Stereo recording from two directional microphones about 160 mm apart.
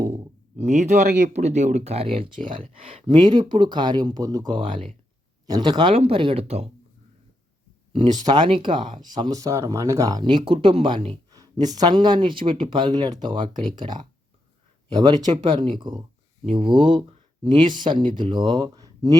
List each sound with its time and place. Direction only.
0.5 s speech: 45° right (ahead or behind)
7.9 s speech: 25° right (ahead or behind)